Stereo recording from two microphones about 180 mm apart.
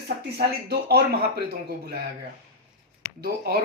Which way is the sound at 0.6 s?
60° right (ahead or behind).